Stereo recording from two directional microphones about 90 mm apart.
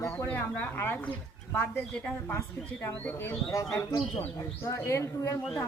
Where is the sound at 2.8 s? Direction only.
30° left (ahead or behind).